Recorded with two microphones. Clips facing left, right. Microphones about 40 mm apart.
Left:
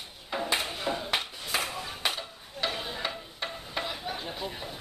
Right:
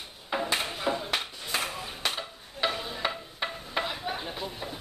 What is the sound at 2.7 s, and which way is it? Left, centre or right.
Stir, centre.